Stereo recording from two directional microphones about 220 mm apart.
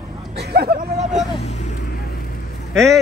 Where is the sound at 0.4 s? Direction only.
45° right (ahead or behind).